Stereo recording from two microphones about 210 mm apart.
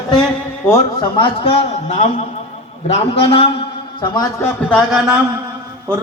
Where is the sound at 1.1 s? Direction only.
25° left (ahead or behind).